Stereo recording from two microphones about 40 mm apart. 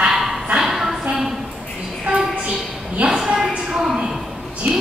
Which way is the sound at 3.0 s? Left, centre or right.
Right.